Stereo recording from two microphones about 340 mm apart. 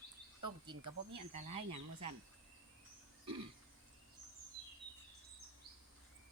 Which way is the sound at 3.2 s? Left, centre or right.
Centre.